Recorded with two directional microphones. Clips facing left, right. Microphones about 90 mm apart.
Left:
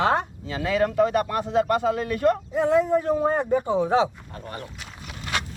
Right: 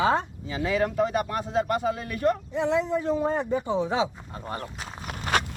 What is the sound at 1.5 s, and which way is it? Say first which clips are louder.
Speech: left 4 dB; 70° left (ahead or behind).